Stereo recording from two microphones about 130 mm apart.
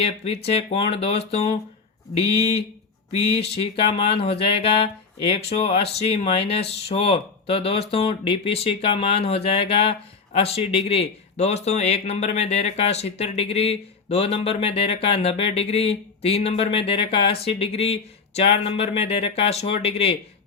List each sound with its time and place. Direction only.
0.0 s speech: 50° left (ahead or behind)
3.1 s speech: 50° left (ahead or behind)